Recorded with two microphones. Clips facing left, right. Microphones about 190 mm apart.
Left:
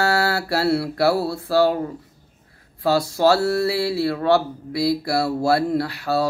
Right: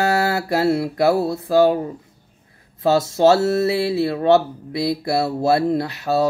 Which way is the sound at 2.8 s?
20° right (ahead or behind).